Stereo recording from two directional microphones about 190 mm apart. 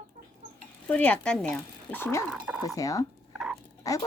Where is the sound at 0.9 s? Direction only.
5° left (ahead or behind).